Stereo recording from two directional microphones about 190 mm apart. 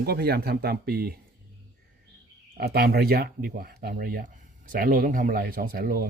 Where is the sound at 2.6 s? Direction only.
55° right (ahead or behind).